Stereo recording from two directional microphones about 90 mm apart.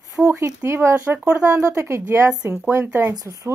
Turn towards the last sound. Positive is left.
turn(degrees=-45)  # may be behind; listen again after turning